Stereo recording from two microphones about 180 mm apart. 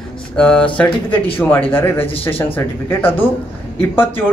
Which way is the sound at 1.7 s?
10° left (ahead or behind).